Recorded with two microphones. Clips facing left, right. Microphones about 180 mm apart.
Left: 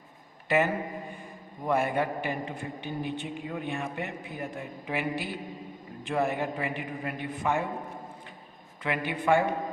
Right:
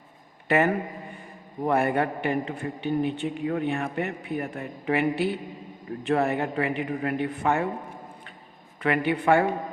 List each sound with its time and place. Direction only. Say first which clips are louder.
0.4 s a man's voice: right 3 dB; 60° right (ahead or behind)
8.8 s a man's voice: right 6 dB; 60° right (ahead or behind)